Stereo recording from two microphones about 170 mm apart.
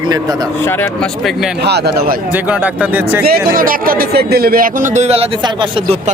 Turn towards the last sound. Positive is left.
turn(degrees=-35)  # may be behind; listen again after turning